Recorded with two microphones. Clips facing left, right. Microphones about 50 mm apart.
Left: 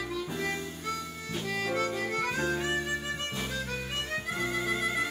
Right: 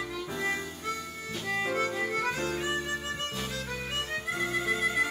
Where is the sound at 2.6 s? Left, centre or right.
Centre.